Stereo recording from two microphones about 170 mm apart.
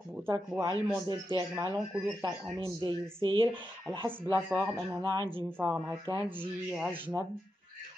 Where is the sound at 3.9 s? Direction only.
15° right (ahead or behind).